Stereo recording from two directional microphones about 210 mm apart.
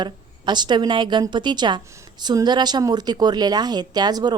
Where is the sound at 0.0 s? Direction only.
20° right (ahead or behind).